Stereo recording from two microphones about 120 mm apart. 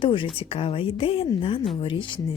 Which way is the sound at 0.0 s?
45° left (ahead or behind).